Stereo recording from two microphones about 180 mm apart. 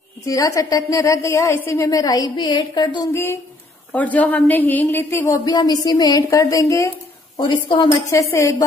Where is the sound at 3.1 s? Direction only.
15° left (ahead or behind).